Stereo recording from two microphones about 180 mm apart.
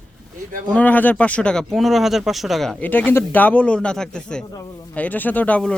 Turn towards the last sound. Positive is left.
turn(degrees=5)  # may be behind; listen again after turning